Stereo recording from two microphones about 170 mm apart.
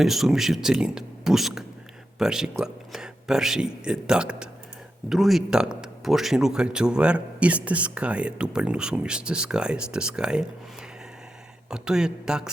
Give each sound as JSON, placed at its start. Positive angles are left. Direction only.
{"t": 0.0, "sound": "speech", "side_deg": 0}
{"t": 11.7, "sound": "speech", "side_deg": -5}